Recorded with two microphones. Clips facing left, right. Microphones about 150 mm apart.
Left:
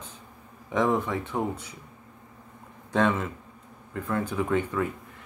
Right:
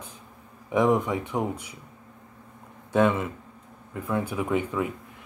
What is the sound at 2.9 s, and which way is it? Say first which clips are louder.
Speech: right 2 dB; 10° right (ahead or behind).